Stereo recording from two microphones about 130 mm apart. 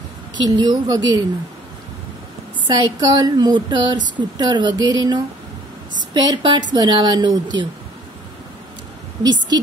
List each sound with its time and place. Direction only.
0.4 s speech: 30° right (ahead or behind)
2.7 s speech: 35° right (ahead or behind)
9.2 s speech: 30° right (ahead or behind)